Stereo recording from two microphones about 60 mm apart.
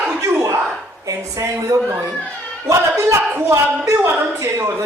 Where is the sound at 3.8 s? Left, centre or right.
Right.